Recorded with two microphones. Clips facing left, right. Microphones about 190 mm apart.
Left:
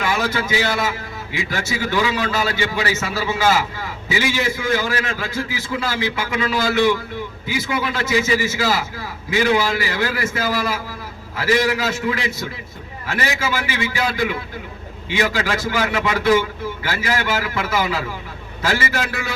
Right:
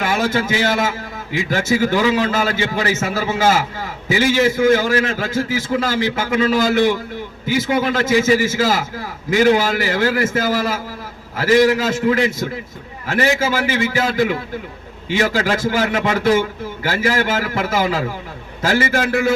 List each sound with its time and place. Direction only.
0.0 s a man's voice: 45° right (ahead or behind)